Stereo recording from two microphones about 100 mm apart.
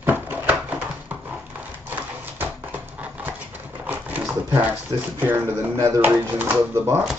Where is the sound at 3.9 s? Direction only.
15° right (ahead or behind).